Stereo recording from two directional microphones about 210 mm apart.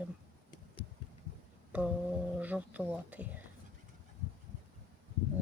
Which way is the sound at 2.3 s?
10° right (ahead or behind).